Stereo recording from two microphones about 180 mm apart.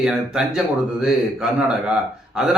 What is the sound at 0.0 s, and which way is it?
Speech, 5° right (ahead or behind).